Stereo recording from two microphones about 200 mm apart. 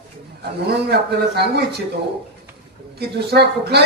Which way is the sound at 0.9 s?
55° right (ahead or behind).